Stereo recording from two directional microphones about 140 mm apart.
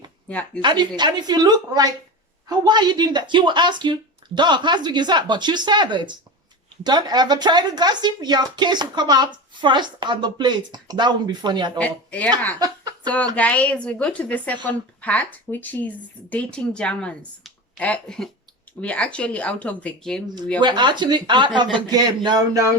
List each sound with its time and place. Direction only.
0.3 s a woman's voice: 10° left (ahead or behind)
0.6 s speech: 35° right (ahead or behind)
11.8 s a woman's voice: 10° left (ahead or behind)
12.5 s a sound: 30° right (ahead or behind)
13.3 s a woman's voice: 10° left (ahead or behind)
20.6 s speech: 35° right (ahead or behind)